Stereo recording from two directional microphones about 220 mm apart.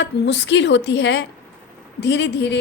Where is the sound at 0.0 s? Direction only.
55° left (ahead or behind).